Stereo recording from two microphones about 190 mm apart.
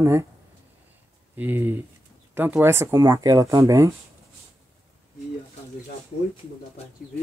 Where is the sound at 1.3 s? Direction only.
10° right (ahead or behind).